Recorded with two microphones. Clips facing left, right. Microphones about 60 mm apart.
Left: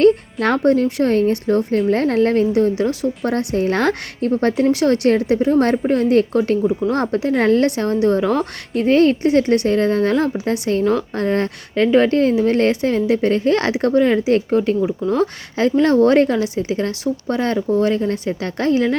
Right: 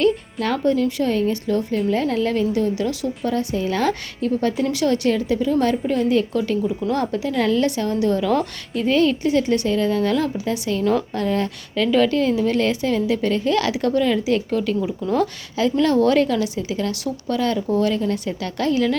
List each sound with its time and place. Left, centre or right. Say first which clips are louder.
0.3 s a woman's voice: left 4 dB; left
3.2 s a woman's voice: left 3 dB; left
5.2 s a woman's voice: left 4 dB; left
10.1 s a woman's voice: left 3 dB; left
10.3 s a woman's voice: left 4 dB; left